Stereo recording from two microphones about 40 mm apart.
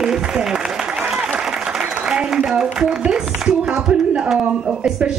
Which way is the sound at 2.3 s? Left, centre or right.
Centre.